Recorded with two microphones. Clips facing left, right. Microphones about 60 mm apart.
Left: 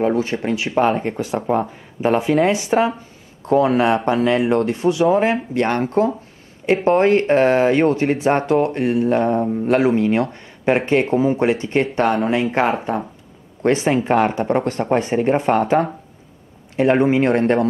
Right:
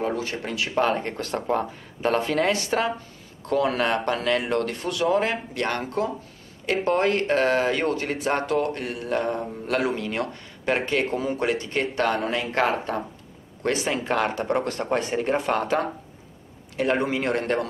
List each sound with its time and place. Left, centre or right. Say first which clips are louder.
0.0 s speech: left 8 dB; left
13.6 s speech: left 8 dB; left